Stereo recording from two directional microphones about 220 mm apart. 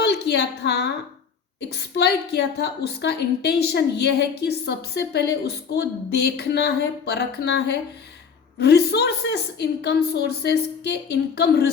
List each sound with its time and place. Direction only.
0.0 s a woman's voice: 50° left (ahead or behind)